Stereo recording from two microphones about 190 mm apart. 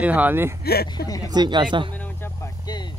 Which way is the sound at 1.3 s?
25° right (ahead or behind).